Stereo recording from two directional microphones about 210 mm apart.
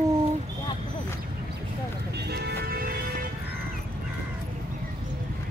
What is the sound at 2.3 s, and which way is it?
Music, 50° right (ahead or behind).